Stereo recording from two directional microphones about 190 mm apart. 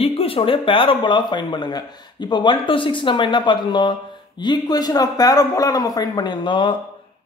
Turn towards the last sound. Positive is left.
turn(degrees=25)  # may be behind; listen again after turning